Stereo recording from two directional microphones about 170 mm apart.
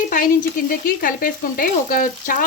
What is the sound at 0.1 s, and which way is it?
A woman's voice, 55° left (ahead or behind).